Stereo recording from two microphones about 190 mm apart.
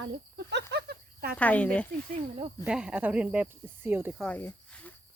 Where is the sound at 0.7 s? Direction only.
55° right (ahead or behind).